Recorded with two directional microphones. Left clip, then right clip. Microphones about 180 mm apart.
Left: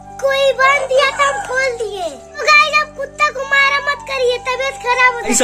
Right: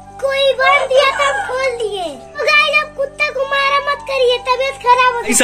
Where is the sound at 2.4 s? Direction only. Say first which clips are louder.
Left 1 dB; 20° left (ahead or behind).